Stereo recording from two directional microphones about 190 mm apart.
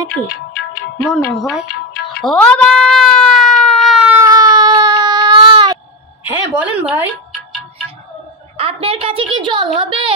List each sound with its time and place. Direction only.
1.1 s music: centre (ahead or behind)
2.2 s a sound: 5° left (ahead or behind)
4.2 s baby cry: 20° right (ahead or behind)
6.2 s a woman's voice: 10° right (ahead or behind)
8.5 s a child's voice: 30° right (ahead or behind)